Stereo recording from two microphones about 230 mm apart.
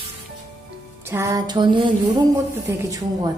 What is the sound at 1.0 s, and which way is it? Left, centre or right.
A woman's voice, centre.